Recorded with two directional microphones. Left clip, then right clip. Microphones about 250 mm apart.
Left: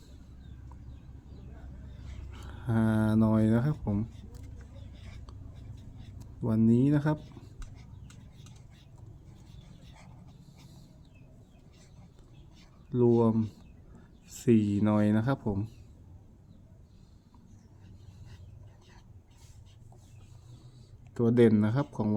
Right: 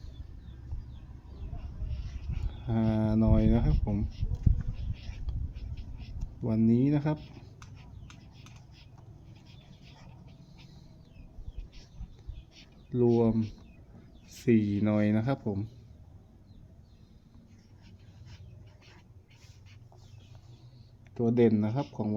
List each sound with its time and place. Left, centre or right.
2.4 s speech: centre
5.7 s a sound: right
6.4 s speech: centre
12.9 s speech: centre
21.2 s speech: left